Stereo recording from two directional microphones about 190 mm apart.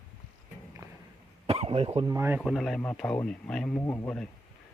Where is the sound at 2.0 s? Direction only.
15° right (ahead or behind).